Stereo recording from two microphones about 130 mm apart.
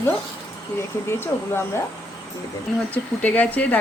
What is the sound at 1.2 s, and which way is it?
Speech, 20° left (ahead or behind).